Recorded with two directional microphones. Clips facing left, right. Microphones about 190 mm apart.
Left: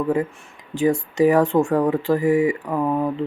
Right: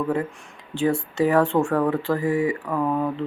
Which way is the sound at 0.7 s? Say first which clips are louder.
Left 3 dB; 10° left (ahead or behind).